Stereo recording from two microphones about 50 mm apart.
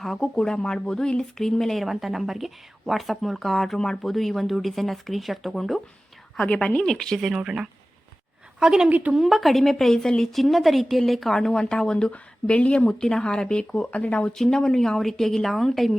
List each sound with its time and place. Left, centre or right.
0.0 s a woman's voice: centre
1.9 s a woman's voice: centre
6.5 s speech: left
6.7 s a woman's voice: centre
7.3 s a woman's voice: centre
8.9 s speech: right
9.1 s a woman's voice: centre; by 12.9 s left
12.9 s a woman's voice: centre
14.0 s speech: left
14.3 s a woman's voice: centre